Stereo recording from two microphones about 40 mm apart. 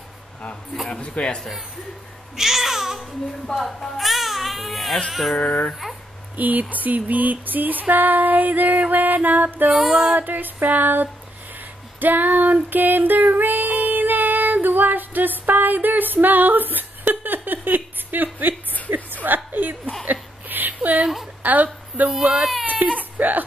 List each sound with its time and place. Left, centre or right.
0.8 s speech: left
2.3 s speech: centre
6.3 s a sound: right
9.8 s speech: centre
10.1 s a sound: right
12.6 s music: right
18.9 s chuckle: right
19.2 s a sound: right
22.1 s speech: centre
22.7 s baby cry: right
23.1 s speech: right